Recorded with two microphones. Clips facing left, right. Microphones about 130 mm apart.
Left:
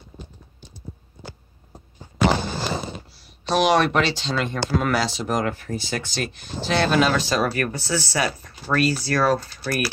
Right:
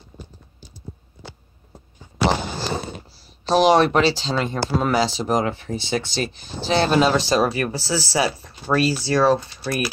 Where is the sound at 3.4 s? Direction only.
35° right (ahead or behind).